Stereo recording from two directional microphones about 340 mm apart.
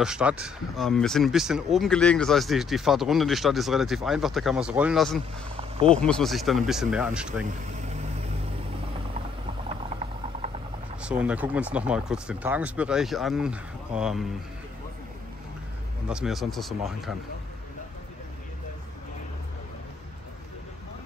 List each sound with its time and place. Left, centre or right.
0.0 s speech: centre
5.6 s a sound: centre
5.9 s speech: centre
11.0 s speech: centre
16.1 s speech: centre